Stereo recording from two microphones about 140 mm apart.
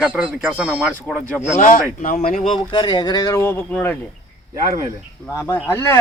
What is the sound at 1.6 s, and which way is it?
Speech, 70° left (ahead or behind).